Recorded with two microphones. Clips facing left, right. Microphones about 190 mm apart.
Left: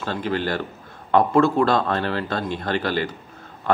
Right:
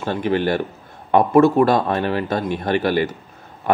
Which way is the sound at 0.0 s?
15° right (ahead or behind).